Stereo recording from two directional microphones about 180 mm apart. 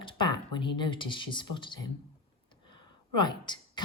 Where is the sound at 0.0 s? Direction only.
25° left (ahead or behind).